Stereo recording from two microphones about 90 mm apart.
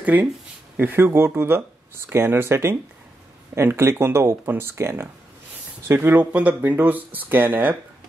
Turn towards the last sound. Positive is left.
turn(degrees=-20)  # may be behind; listen again after turning